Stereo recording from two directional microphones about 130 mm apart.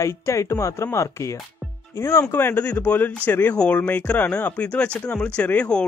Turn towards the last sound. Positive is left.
turn(degrees=10)  # may be behind; listen again after turning